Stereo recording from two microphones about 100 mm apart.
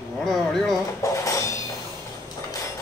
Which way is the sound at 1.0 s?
30° left (ahead or behind).